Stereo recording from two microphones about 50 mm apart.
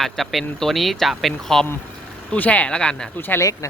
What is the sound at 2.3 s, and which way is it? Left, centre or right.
Speech, left.